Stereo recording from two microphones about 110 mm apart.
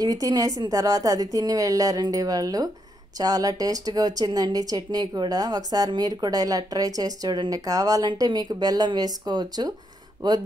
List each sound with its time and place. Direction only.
0.0 s speech: 35° right (ahead or behind)